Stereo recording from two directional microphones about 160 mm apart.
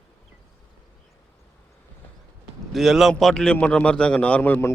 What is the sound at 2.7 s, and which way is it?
A man's voice, centre (ahead or behind).